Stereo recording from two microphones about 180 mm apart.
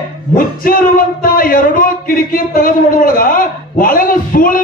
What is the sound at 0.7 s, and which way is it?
Speech, 55° left (ahead or behind).